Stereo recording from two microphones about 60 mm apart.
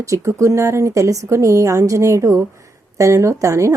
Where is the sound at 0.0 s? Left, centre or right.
Right.